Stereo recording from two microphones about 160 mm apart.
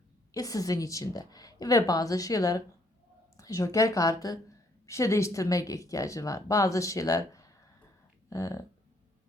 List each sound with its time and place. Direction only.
0.3 s a woman's voice: 20° left (ahead or behind)